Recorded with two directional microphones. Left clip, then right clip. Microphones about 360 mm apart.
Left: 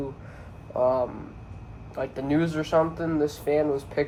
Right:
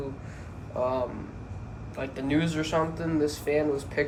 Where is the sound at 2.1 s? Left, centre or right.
Centre.